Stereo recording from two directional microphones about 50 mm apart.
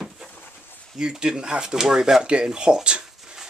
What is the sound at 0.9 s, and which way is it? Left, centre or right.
Speech, centre.